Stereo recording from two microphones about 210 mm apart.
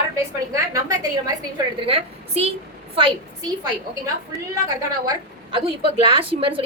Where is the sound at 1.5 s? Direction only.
30° right (ahead or behind).